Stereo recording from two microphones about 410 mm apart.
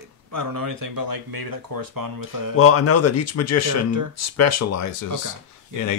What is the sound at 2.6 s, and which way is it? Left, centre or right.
Speech, left.